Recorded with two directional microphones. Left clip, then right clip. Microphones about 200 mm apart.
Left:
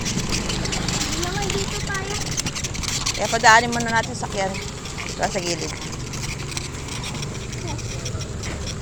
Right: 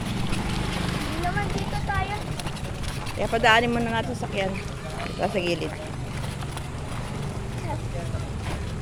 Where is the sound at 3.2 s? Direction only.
25° right (ahead or behind).